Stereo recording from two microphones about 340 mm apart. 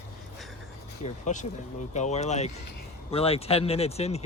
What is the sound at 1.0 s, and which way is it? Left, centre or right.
Speech, left.